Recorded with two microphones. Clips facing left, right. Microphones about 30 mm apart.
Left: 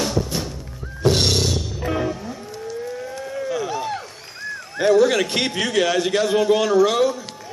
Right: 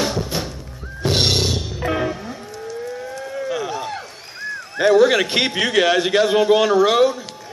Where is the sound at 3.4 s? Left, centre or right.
Centre.